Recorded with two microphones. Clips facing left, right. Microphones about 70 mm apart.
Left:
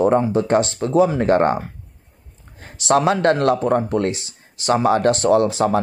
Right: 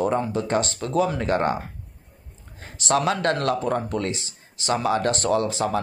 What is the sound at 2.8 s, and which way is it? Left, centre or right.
Speech, left.